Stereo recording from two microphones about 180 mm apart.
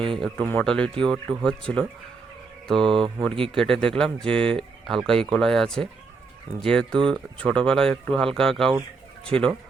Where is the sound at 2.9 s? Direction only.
30° right (ahead or behind).